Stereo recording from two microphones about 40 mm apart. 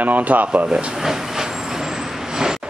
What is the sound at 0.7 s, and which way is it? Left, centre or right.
Speech, right.